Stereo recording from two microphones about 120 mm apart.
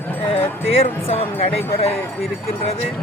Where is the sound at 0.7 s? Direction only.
55° left (ahead or behind).